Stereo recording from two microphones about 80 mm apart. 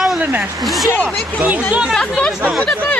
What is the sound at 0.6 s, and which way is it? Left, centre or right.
Speech, centre.